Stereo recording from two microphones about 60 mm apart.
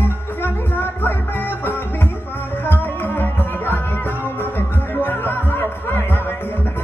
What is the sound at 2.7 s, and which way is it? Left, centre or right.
Music, left.